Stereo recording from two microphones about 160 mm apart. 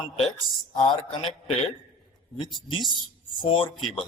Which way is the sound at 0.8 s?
30° left (ahead or behind).